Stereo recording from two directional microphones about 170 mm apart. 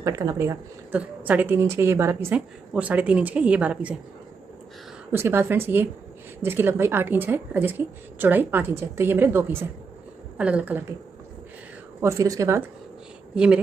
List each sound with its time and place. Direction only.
0.0 s speech: 20° right (ahead or behind)
0.9 s a woman's voice: 10° right (ahead or behind)
5.1 s a woman's voice: 15° right (ahead or behind)
12.0 s a woman's voice: 15° right (ahead or behind)
13.3 s speech: 5° right (ahead or behind)